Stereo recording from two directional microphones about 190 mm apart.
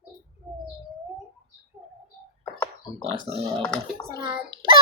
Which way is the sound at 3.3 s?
30° right (ahead or behind).